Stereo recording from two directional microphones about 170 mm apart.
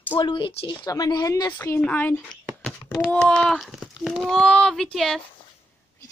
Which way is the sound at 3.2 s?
5° left (ahead or behind).